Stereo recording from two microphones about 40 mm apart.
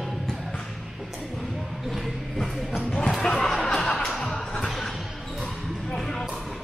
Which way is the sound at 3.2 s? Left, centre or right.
Centre.